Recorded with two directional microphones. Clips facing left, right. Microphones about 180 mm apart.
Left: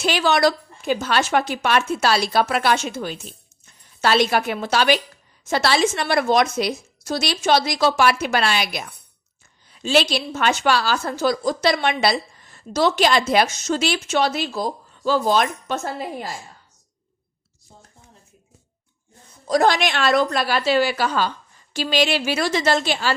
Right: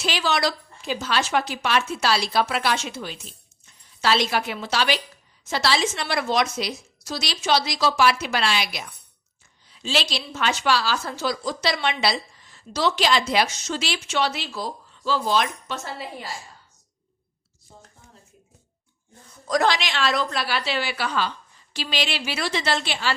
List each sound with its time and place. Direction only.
0.0 s a woman's voice: 50° left (ahead or behind)
19.6 s a woman's voice: 50° left (ahead or behind)